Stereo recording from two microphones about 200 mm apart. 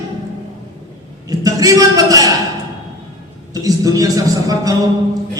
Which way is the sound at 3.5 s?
15° right (ahead or behind).